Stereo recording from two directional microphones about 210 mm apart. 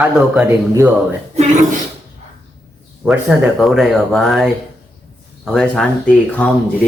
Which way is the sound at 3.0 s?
5° right (ahead or behind).